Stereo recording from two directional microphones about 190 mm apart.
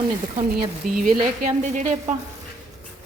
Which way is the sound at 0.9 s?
45° right (ahead or behind).